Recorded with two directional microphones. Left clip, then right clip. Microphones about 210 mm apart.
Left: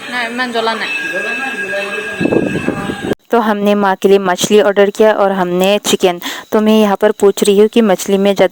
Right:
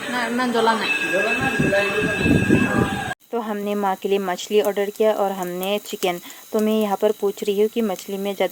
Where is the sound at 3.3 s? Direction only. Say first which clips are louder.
Left 16 dB; 50° left (ahead or behind).